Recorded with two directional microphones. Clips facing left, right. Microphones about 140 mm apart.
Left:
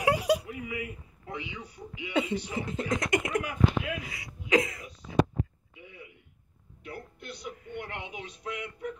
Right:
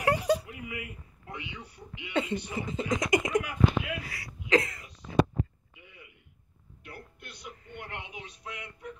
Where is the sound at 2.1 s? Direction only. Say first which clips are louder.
Left 1 dB; 10° left (ahead or behind).